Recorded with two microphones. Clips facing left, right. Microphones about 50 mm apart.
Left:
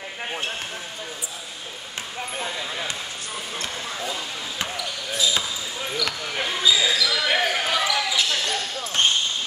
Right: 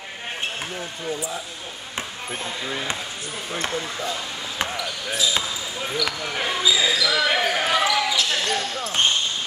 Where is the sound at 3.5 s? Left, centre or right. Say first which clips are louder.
Right 8 dB; right.